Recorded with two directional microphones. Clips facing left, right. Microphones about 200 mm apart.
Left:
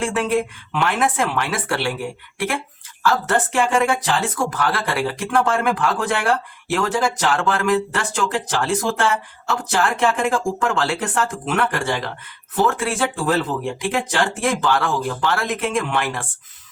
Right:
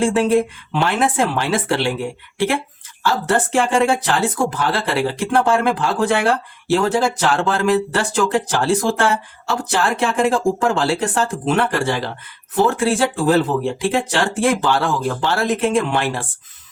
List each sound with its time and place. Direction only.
0.0 s speech: 30° right (ahead or behind)
3.0 s speech: 30° right (ahead or behind)